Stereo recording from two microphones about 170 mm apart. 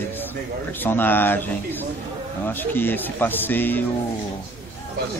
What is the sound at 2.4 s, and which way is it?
Speech, 10° left (ahead or behind).